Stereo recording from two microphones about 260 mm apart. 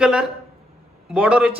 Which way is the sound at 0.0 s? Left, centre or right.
Centre.